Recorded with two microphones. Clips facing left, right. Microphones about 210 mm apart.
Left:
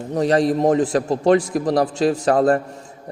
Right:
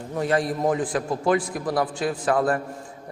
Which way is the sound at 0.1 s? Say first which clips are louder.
Left 6 dB; 40° left (ahead or behind).